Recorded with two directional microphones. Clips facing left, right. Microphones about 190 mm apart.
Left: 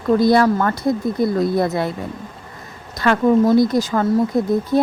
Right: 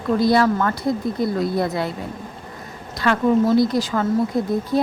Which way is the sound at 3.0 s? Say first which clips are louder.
Left 3 dB; 45° left (ahead or behind).